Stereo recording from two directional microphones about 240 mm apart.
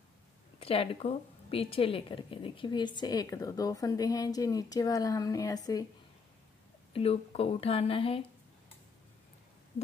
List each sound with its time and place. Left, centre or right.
0.6 s a woman's voice: left
6.9 s speech: left